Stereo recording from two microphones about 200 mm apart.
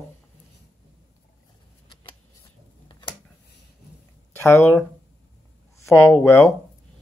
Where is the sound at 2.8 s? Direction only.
25° left (ahead or behind).